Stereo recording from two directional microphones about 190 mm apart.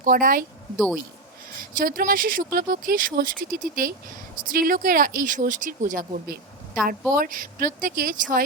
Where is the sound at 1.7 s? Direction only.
45° right (ahead or behind).